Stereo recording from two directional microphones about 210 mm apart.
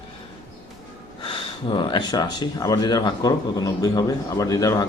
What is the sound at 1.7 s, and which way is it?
Speech, 20° left (ahead or behind).